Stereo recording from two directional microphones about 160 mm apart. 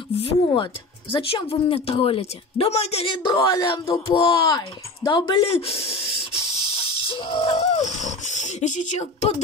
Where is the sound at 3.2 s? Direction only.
30° left (ahead or behind).